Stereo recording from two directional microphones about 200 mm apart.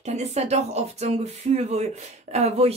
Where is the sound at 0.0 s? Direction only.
35° right (ahead or behind).